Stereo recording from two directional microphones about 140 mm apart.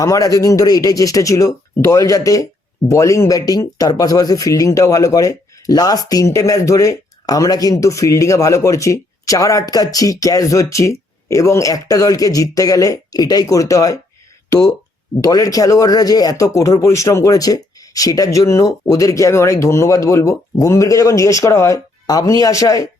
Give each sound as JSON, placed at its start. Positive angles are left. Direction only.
{"t": 0.0, "sound": "speech", "side_deg": 25}
{"t": 15.2, "sound": "speech", "side_deg": 25}